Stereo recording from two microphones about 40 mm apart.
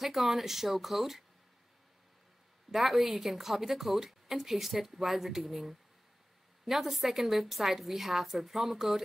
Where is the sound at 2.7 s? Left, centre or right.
Centre.